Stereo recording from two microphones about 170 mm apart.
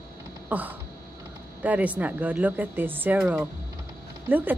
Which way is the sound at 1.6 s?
10° right (ahead or behind).